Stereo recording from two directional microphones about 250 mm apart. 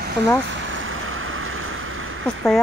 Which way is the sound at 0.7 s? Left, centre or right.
Right.